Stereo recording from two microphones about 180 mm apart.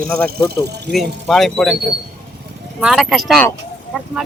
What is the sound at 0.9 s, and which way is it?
Speech, centre (ahead or behind).